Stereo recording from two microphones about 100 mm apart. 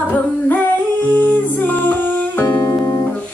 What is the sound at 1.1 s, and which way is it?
Singing, 15° left (ahead or behind).